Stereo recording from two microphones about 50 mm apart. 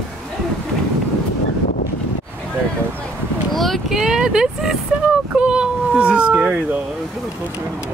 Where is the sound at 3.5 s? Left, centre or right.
Centre.